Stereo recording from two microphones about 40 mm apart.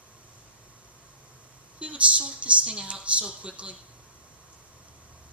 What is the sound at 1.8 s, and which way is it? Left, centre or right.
Speech, right.